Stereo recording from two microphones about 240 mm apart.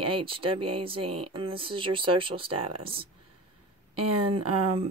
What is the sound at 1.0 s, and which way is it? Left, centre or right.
Speech, right.